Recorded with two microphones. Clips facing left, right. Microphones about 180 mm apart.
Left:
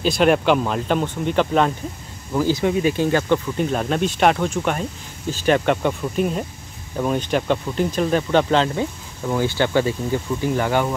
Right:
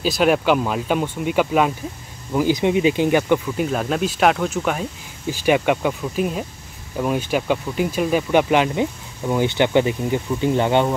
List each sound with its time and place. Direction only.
0.0 s speech: 5° right (ahead or behind)
3.4 s speech: centre (ahead or behind); by 11.0 s 25° right (ahead or behind)